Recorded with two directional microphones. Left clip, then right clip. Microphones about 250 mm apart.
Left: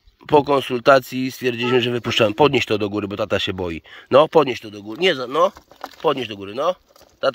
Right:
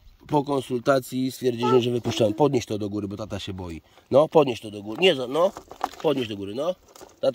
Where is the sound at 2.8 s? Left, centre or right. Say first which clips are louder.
Left 7 dB; left.